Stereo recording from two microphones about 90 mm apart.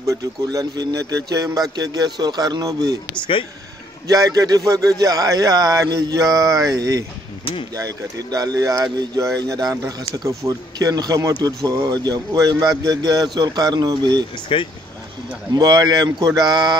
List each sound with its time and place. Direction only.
0.0 s speech: 35° right (ahead or behind)
4.1 s speech: 40° right (ahead or behind)
14.3 s speech: 70° left (ahead or behind)
15.5 s speech: 50° right (ahead or behind)